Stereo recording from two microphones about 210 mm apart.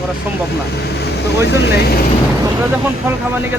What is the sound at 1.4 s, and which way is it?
Speech, 55° left (ahead or behind).